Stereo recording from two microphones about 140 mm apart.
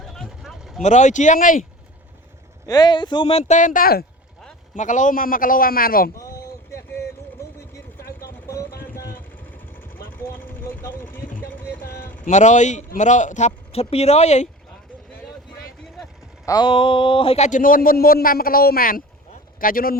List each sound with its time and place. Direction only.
0.0 s vehicle: centre (ahead or behind)
0.8 s a man's voice: 60° left (ahead or behind); by 1.6 s 75° left (ahead or behind)
2.6 s speech: 30° left (ahead or behind); by 4.0 s 85° left
4.7 s a man's voice: 65° left (ahead or behind); by 6.1 s 90° left
6.1 s a sound: 25° left (ahead or behind)
7.9 s vehicle: 90° left
10.1 s vehicle: 15° left (ahead or behind)
11.3 s a sound: 10° left (ahead or behind)
12.2 s a man's voice: 60° left (ahead or behind)
16.5 s speech: 35° left (ahead or behind); by 17.6 s 50° left (ahead or behind)
17.6 s a man's voice: 85° left